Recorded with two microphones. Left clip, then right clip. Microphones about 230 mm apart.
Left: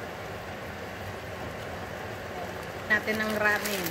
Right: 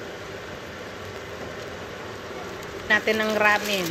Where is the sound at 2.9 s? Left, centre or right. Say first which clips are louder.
Right 6 dB; right.